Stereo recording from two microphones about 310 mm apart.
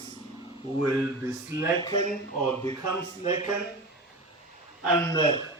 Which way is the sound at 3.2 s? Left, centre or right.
Centre.